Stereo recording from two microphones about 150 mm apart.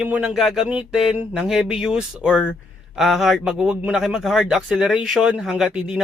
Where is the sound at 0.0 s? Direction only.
10° right (ahead or behind).